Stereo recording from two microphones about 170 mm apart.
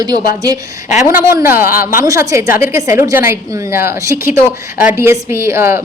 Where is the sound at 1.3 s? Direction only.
15° right (ahead or behind).